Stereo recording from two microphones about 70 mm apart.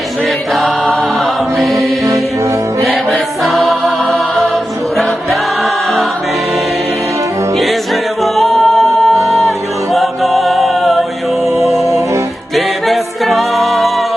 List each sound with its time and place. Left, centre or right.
1.5 s music: centre
3.7 s music: centre
8.2 s music: centre
11.5 s music: right
12.5 s music: centre